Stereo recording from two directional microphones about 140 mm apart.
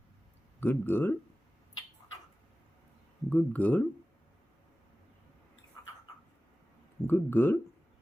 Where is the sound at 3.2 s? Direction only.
10° left (ahead or behind).